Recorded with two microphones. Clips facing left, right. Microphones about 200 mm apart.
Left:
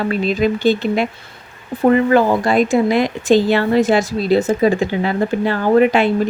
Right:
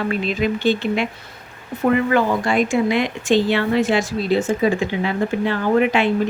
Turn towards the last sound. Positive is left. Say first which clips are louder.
# left 4 dB
turn(degrees=40)  # may be behind; listen again after turning